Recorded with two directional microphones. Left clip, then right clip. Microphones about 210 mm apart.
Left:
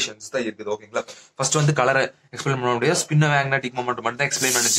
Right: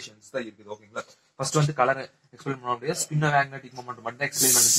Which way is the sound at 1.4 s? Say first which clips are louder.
Left 4 dB; 20° left (ahead or behind).